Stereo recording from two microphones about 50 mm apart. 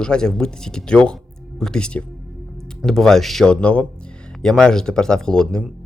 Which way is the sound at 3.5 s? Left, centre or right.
Left.